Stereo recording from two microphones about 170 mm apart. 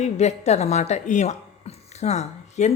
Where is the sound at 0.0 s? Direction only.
40° left (ahead or behind).